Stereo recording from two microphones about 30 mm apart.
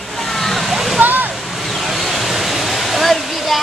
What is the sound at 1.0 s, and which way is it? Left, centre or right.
Waterfall, right.